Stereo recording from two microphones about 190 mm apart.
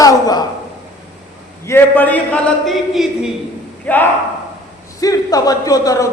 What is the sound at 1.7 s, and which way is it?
A man's voice, 10° left (ahead or behind).